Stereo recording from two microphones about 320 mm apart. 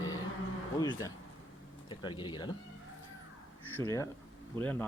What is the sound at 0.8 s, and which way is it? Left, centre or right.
Speech, centre.